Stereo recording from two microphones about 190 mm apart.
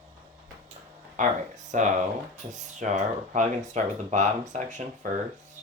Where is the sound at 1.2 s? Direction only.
40° right (ahead or behind).